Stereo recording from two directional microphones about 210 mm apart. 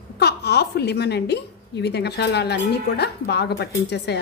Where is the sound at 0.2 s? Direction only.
50° left (ahead or behind).